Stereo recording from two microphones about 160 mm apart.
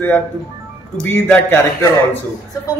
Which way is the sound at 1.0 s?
10° left (ahead or behind).